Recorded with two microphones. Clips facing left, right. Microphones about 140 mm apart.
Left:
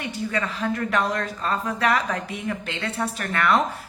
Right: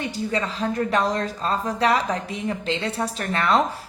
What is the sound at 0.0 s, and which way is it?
A woman's voice, 30° right (ahead or behind).